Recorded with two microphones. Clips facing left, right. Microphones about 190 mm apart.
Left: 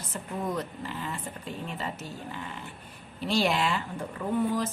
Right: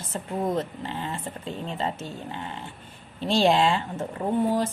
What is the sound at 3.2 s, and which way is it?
Speech, 25° right (ahead or behind).